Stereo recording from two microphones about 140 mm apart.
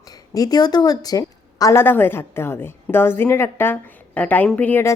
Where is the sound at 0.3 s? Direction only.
30° left (ahead or behind).